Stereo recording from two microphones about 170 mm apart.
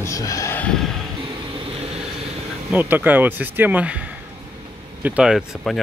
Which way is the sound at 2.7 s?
10° right (ahead or behind).